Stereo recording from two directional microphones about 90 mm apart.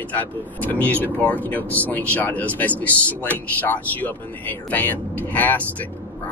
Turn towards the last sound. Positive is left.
turn(degrees=20)  # may be behind; listen again after turning